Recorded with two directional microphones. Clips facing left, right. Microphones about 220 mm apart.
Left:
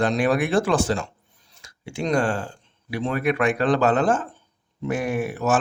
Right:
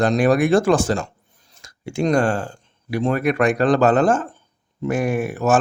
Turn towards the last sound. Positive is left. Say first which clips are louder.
# right 3 dB
turn(degrees=-45)  # may be behind; listen again after turning